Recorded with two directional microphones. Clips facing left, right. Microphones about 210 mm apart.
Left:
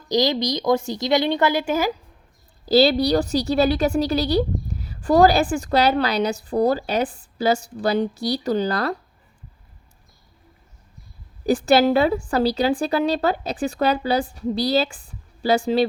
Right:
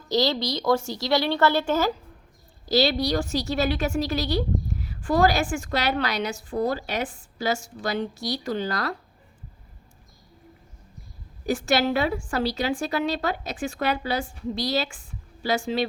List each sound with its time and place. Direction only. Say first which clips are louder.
0.1 s speech: left 3 dB; 15° left (ahead or behind)
2.7 s a woman's voice: left 6 dB; 35° left (ahead or behind)
11.4 s a woman's voice: left 6 dB; 35° left (ahead or behind)